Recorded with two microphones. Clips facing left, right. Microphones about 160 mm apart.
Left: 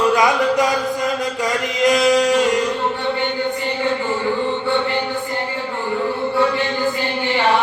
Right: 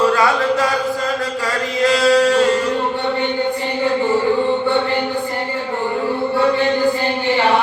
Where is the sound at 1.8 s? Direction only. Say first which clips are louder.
Right 1 dB; 15° left (ahead or behind).